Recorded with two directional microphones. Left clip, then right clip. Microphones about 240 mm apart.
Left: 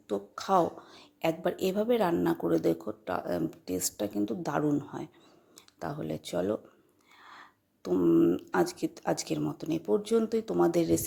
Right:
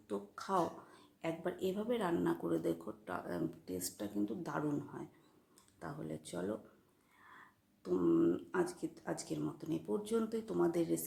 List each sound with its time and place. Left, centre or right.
0.1 s speech: left